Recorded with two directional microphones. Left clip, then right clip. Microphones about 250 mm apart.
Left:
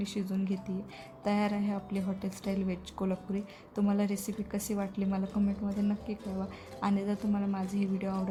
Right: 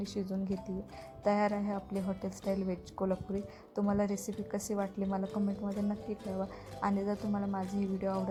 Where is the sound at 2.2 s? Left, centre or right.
Centre.